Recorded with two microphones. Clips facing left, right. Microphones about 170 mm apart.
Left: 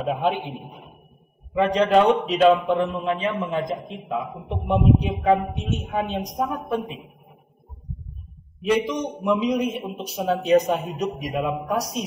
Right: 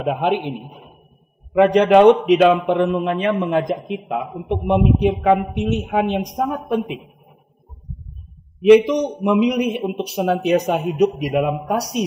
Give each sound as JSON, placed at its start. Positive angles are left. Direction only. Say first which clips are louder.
{"t": 0.0, "sound": "a man's voice", "louder": "right 4 dB", "side_deg": -65}
{"t": 1.5, "sound": "a man's voice", "louder": "right 6 dB", "side_deg": -70}
{"t": 8.6, "sound": "a man's voice", "louder": "right 11 dB", "side_deg": -65}